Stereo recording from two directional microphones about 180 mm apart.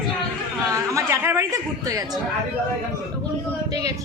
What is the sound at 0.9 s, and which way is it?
Speech, 15° right (ahead or behind).